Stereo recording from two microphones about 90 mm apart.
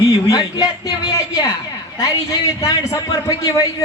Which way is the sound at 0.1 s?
40° left (ahead or behind).